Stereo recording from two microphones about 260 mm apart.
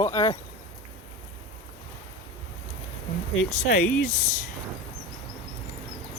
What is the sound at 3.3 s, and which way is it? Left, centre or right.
Speech, left.